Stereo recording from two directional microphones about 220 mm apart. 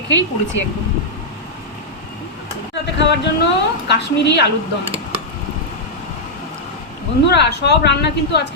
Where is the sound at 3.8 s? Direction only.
50° left (ahead or behind).